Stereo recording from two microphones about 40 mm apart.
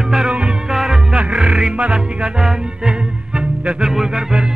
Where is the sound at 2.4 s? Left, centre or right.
Centre.